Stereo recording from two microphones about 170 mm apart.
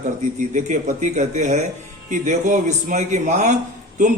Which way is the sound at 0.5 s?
45° right (ahead or behind).